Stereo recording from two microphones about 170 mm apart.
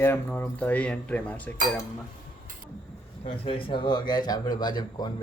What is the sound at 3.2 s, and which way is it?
Speech, 30° left (ahead or behind).